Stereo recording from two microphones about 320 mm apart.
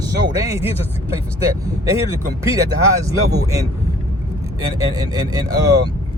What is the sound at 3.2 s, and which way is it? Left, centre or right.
Speech, right.